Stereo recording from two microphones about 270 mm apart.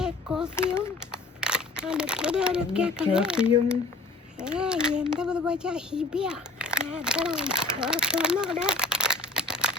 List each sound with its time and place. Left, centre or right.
0.0 s a sound: centre
0.5 s speech: centre
1.1 s speech: centre